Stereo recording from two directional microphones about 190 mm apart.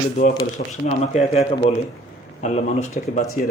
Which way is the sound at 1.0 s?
35° left (ahead or behind).